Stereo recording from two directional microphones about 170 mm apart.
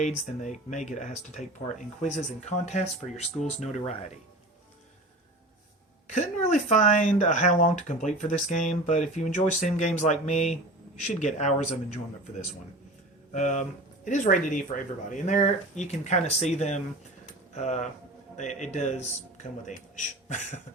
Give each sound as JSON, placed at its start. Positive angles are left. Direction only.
{"t": 0.0, "sound": "speech", "side_deg": 45}
{"t": 6.1, "sound": "speech", "side_deg": 45}
{"t": 13.3, "sound": "speech", "side_deg": 45}